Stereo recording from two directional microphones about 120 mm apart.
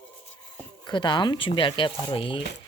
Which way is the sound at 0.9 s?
40° left (ahead or behind).